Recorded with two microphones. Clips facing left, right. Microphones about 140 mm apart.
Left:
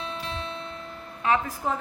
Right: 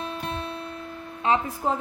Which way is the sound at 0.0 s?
50° right (ahead or behind).